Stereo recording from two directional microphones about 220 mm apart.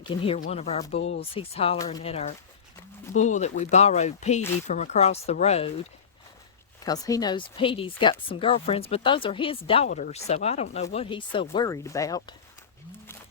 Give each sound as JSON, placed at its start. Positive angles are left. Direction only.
{"t": 0.3, "sound": "speech", "side_deg": 30}
{"t": 1.0, "sound": "speech", "side_deg": 55}
{"t": 1.3, "sound": "speech", "side_deg": 25}
{"t": 6.8, "sound": "speech", "side_deg": 15}